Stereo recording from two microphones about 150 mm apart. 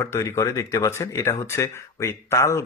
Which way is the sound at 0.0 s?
20° left (ahead or behind).